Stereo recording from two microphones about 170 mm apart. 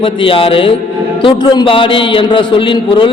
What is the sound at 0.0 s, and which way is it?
A man's voice, 30° left (ahead or behind).